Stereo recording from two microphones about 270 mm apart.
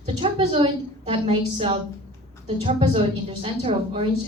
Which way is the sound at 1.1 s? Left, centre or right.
Centre.